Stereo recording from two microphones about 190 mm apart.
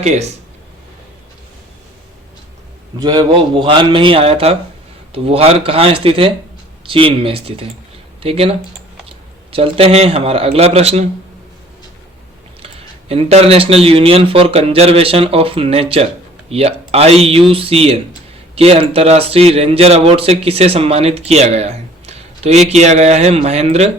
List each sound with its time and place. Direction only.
3.0 s a man's voice: 20° right (ahead or behind)
12.6 s speech: 30° right (ahead or behind)